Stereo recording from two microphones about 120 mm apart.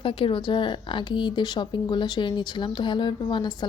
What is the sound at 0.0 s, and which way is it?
A woman's voice, 50° left (ahead or behind).